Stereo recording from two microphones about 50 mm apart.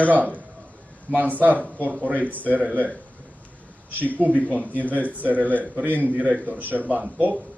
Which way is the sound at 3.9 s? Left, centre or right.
Right.